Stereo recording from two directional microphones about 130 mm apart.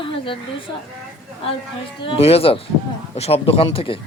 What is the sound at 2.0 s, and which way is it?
A man's voice, 50° left (ahead or behind).